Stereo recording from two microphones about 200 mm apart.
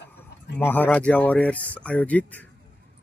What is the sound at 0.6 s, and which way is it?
Speech, 10° left (ahead or behind).